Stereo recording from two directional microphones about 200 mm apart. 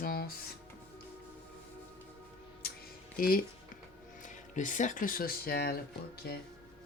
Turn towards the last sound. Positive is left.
turn(degrees=50)  # may be behind; listen again after turning